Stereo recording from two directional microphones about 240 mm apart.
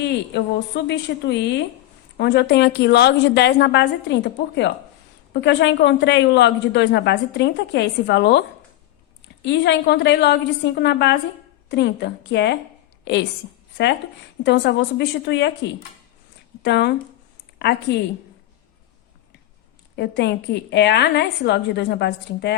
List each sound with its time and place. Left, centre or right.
0.0 s a woman's voice: left
14.4 s a woman's voice: left
16.6 s a woman's voice: left
20.0 s a woman's voice: left